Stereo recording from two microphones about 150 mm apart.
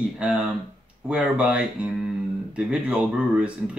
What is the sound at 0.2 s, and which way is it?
Speech, 5° right (ahead or behind).